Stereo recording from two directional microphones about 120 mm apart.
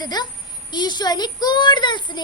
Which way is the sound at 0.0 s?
35° left (ahead or behind).